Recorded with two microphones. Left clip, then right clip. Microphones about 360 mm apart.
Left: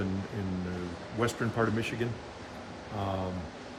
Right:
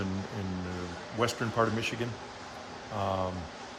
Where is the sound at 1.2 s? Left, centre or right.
Centre.